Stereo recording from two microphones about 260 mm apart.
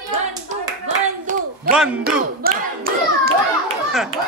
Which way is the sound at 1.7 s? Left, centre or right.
Centre.